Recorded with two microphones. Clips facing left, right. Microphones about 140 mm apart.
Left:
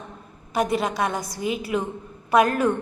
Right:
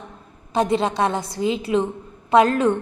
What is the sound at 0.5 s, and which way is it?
A woman's voice, 25° right (ahead or behind).